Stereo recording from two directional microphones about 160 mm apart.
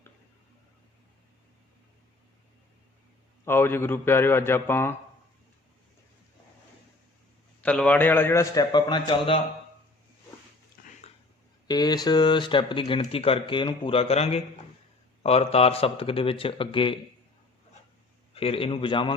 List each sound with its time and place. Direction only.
3.4 s a man's voice: 15° left (ahead or behind)
7.6 s a man's voice: 10° left (ahead or behind); by 9.4 s 35° left (ahead or behind)
10.8 s dog: 70° left (ahead or behind)
11.7 s speech: 25° left (ahead or behind)
18.3 s speech: 35° left (ahead or behind)